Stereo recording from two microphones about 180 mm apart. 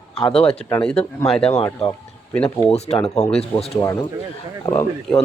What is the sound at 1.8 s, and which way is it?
Speech, 35° left (ahead or behind).